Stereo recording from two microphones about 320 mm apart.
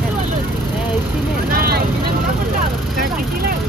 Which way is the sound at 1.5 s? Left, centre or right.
Right.